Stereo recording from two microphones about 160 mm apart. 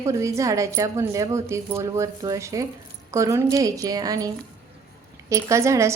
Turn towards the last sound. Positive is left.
turn(degrees=-20)  # may be behind; listen again after turning